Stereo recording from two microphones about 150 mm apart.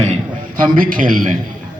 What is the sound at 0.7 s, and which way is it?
Speech, 65° right (ahead or behind).